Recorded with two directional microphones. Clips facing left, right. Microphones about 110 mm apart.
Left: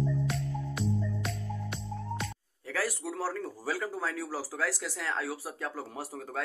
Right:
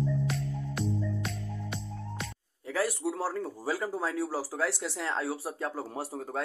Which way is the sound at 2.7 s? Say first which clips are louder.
Right 3 dB; 25° right (ahead or behind).